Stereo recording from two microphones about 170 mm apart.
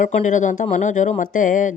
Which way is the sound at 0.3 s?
45° left (ahead or behind).